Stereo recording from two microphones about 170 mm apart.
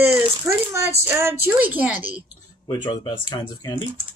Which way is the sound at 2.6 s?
25° left (ahead or behind).